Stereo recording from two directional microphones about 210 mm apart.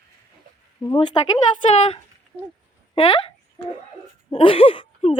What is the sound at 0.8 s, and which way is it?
Speech, 20° left (ahead or behind).